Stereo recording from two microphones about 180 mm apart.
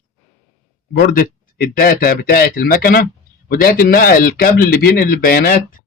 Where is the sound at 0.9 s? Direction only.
55° left (ahead or behind).